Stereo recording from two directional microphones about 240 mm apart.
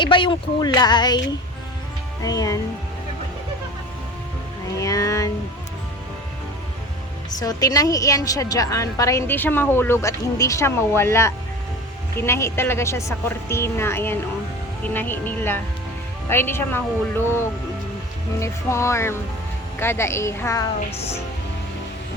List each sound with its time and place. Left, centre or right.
0.0 s a woman's voice: centre
2.2 s a woman's voice: centre
4.8 s speech: centre
7.3 s a woman's voice: centre